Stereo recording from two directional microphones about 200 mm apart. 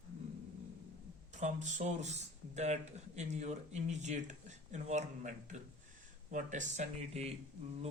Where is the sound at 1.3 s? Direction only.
35° right (ahead or behind).